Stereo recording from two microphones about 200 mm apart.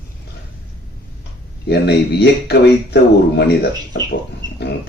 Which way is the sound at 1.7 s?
55° left (ahead or behind).